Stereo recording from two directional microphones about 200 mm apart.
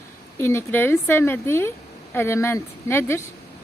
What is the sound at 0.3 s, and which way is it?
A woman's voice, 15° left (ahead or behind).